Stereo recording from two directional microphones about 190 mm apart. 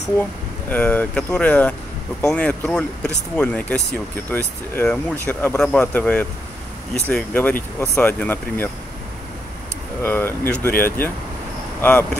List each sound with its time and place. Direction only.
0.7 s speech: 10° left (ahead or behind)
10.0 s speech: 10° left (ahead or behind)